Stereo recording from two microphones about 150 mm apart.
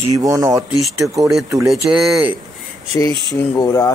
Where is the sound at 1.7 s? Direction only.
Centre (ahead or behind).